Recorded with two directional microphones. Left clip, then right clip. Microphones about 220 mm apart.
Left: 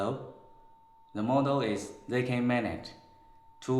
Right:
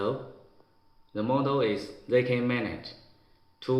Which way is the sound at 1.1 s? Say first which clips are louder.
Right 1 dB; 20° left (ahead or behind).